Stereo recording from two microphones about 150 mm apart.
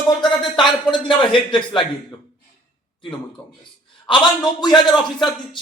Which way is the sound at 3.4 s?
35° left (ahead or behind).